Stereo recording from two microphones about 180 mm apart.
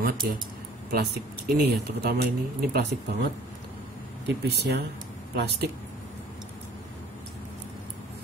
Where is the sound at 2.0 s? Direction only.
60° right (ahead or behind).